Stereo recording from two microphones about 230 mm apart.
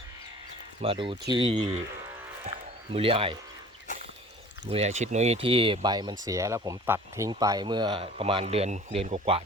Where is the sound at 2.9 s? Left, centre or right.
Right.